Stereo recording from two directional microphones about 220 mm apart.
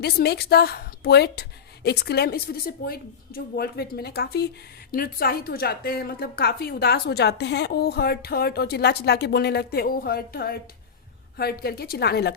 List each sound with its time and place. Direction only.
0.0 s a woman's voice: 45° left (ahead or behind)